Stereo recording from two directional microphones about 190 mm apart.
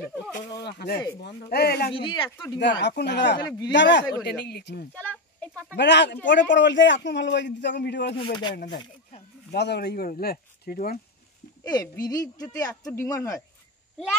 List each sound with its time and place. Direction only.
0.6 s speech: 60° left (ahead or behind)
2.0 s speech: 25° left (ahead or behind)
3.0 s a man's voice: 65° left (ahead or behind)
4.9 s a sound: 5° left (ahead or behind)
5.8 s a man's voice: 65° left (ahead or behind)
8.2 s speech: 25° left (ahead or behind)
9.5 s speech: 60° left (ahead or behind)
11.7 s speech: 20° left (ahead or behind)